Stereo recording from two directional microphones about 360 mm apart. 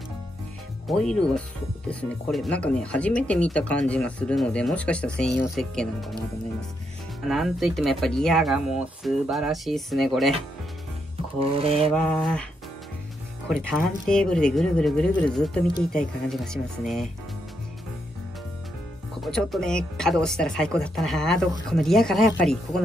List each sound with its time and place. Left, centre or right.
0.8 s speech: centre
7.2 s speech: centre
11.3 s rub: centre
11.9 s speech: centre
13.5 s speech: centre
19.2 s speech: centre